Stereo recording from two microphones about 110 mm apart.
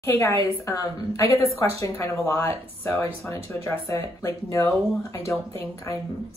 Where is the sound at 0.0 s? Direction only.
25° left (ahead or behind).